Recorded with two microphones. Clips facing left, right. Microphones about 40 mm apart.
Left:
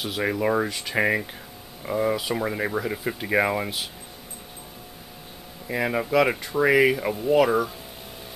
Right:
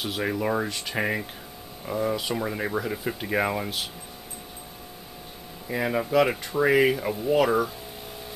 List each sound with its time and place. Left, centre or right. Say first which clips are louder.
0.2 s speech: left 3 dB; centre
0.7 s speech: left 4 dB; centre
2.1 s speech: left 2 dB; centre
5.7 s speech: left 1 dB; centre